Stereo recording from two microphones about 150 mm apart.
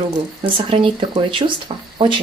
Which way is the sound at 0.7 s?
35° right (ahead or behind).